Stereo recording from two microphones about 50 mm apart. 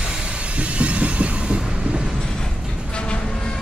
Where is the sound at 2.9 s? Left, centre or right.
Centre.